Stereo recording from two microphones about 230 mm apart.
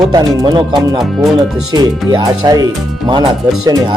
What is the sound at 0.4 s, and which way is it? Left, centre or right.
Speech, centre.